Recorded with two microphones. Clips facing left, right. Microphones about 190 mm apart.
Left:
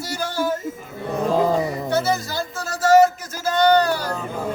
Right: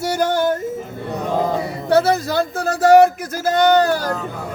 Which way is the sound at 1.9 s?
60° right (ahead or behind).